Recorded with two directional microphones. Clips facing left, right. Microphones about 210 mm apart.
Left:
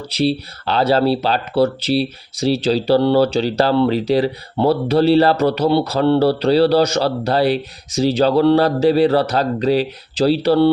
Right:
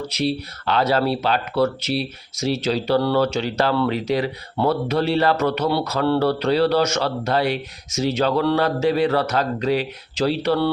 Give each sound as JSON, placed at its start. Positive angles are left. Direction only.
{"t": 0.1, "sound": "speech", "side_deg": 30}